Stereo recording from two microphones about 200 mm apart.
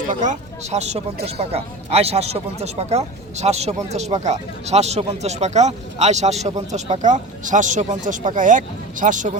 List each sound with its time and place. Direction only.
0.1 s a man's voice: 40° right (ahead or behind)